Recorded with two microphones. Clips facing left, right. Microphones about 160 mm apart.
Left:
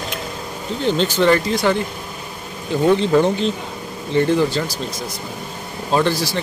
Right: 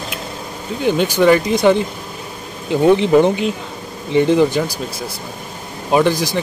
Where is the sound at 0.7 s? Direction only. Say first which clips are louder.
Right 3 dB; 10° right (ahead or behind).